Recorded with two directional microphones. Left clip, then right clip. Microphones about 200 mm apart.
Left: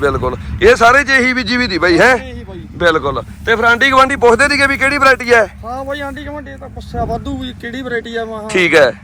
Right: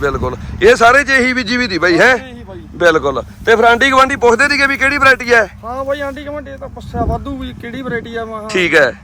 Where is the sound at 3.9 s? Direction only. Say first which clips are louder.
Left 1 dB; 10° right (ahead or behind).